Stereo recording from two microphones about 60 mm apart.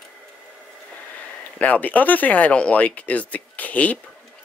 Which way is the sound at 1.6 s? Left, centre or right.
Left.